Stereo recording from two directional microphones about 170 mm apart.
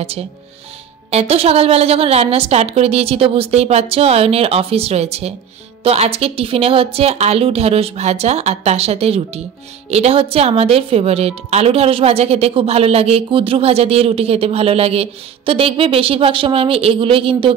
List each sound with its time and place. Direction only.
1.1 s speech: 35° right (ahead or behind)